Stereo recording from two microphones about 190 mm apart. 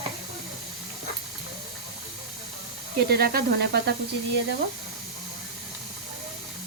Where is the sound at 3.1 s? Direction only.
55° right (ahead or behind).